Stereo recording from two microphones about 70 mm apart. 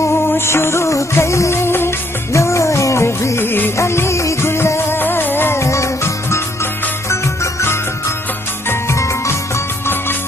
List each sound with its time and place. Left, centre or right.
0.3 s music: left
8.6 s music: left